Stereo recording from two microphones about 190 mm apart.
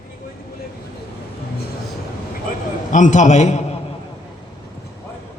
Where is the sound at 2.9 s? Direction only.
40° left (ahead or behind).